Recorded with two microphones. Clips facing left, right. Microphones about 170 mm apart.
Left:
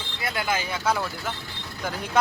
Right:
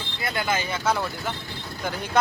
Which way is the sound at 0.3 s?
5° left (ahead or behind).